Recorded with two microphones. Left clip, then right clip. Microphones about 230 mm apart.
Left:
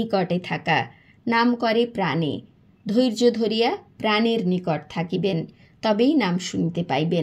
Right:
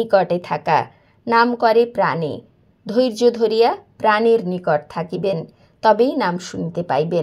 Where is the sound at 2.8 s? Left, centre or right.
Centre.